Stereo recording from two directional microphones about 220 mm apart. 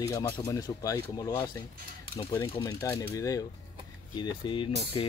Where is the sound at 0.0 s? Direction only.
15° left (ahead or behind).